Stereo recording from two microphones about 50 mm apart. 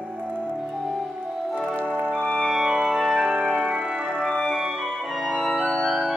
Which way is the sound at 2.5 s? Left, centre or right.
Centre.